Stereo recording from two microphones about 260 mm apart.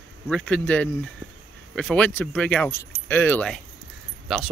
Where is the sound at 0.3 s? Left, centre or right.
Centre.